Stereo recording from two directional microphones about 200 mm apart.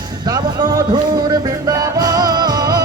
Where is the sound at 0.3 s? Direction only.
20° right (ahead or behind).